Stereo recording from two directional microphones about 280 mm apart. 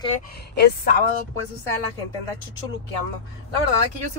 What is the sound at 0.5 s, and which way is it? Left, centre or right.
Speech, left.